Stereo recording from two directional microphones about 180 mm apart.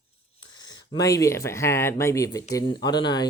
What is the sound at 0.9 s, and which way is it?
Speech, 20° left (ahead or behind).